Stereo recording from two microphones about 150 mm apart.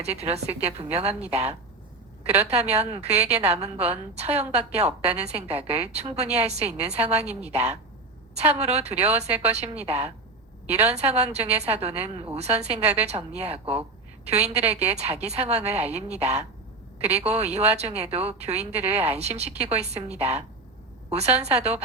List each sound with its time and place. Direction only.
0.0 s a woman's voice: 45° right (ahead or behind)
2.2 s a woman's voice: 10° right (ahead or behind)
2.5 s a woman's voice: 45° right (ahead or behind)